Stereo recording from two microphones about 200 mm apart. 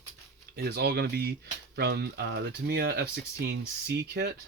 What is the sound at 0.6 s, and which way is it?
Speech, 55° right (ahead or behind).